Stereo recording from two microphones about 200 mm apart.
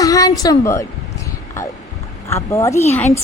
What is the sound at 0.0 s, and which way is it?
Speech, 15° left (ahead or behind).